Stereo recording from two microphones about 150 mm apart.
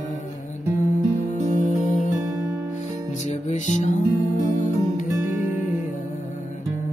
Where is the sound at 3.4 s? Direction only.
50° left (ahead or behind).